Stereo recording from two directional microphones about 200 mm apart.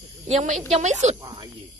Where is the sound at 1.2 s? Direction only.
20° right (ahead or behind).